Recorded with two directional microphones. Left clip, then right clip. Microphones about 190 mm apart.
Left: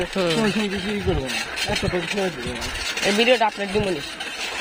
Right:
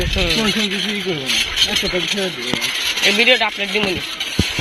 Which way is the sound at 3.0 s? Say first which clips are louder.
Right 4 dB; 10° left (ahead or behind).